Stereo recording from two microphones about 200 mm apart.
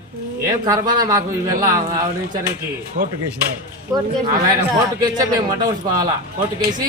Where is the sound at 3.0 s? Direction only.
35° right (ahead or behind).